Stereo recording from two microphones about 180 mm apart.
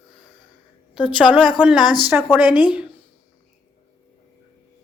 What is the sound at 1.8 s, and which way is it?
Speech, 25° left (ahead or behind).